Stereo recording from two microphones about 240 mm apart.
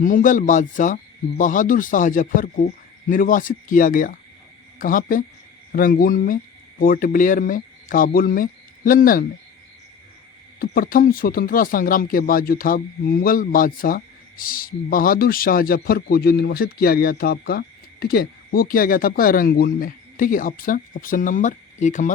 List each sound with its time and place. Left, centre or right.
0.0 s speech: left
10.6 s speech: left